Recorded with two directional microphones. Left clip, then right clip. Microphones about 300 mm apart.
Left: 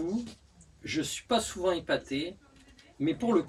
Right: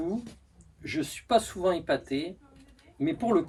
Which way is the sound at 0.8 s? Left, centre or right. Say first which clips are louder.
Right 1 dB; centre.